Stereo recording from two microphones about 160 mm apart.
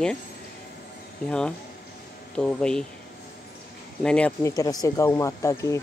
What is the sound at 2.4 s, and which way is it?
Speech, 5° left (ahead or behind).